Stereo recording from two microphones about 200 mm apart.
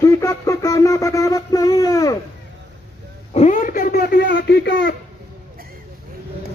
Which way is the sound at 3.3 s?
35° left (ahead or behind).